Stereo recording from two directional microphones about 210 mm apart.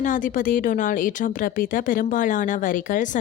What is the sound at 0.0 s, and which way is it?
Speech, 40° left (ahead or behind).